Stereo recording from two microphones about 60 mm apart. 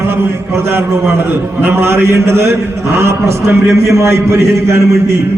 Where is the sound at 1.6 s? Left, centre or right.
Right.